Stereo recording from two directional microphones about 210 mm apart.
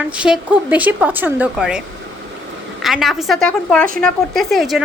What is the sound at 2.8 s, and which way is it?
A woman's voice, centre (ahead or behind).